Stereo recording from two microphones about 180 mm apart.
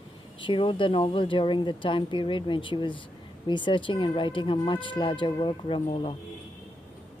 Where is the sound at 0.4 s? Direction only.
25° left (ahead or behind).